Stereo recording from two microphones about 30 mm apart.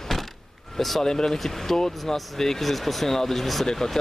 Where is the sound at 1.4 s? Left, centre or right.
Centre.